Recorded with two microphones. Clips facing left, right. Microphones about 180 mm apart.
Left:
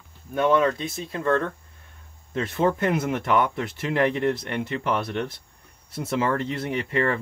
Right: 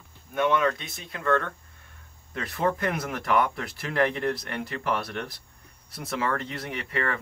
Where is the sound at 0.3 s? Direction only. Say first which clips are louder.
Left 4 dB; 30° left (ahead or behind).